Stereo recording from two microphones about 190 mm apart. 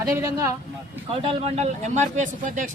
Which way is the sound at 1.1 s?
30° right (ahead or behind).